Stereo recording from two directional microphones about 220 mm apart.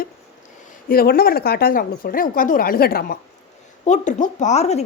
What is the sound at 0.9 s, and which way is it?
A woman's voice, 45° left (ahead or behind).